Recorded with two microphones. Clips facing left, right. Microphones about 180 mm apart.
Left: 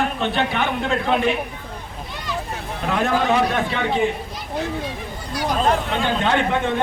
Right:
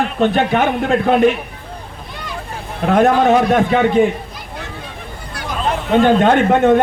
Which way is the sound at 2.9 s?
50° right (ahead or behind).